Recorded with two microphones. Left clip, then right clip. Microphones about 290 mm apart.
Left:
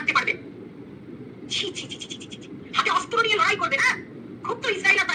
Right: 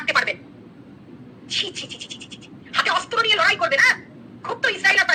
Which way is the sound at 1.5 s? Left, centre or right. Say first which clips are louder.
Right 3 dB; centre.